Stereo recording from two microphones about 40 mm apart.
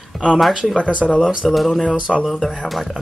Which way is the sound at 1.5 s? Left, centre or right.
Centre.